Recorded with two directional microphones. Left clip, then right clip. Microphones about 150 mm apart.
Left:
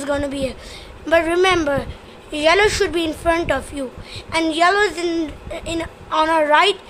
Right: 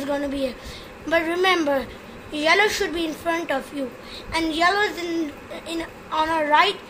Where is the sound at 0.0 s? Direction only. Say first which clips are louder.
Left 3 dB; 25° left (ahead or behind).